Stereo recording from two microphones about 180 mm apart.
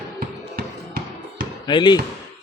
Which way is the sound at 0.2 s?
55° right (ahead or behind).